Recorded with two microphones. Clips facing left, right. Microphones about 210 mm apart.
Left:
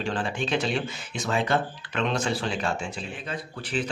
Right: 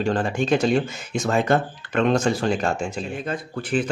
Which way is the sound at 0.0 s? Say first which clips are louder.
Right 6 dB; 45° right (ahead or behind).